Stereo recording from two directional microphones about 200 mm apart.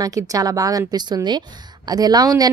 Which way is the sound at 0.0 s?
20° right (ahead or behind).